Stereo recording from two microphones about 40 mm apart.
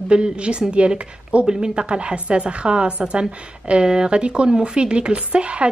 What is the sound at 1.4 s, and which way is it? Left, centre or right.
A woman's voice, centre.